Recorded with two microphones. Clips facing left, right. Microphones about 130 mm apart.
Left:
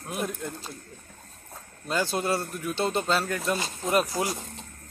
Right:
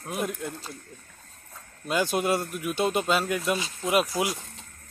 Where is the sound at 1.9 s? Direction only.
15° right (ahead or behind).